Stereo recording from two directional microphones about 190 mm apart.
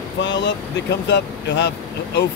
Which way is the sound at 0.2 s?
70° left (ahead or behind).